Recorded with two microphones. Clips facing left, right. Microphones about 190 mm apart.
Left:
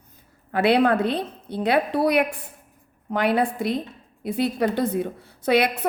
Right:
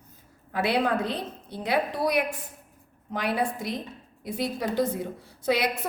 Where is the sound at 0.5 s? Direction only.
65° left (ahead or behind).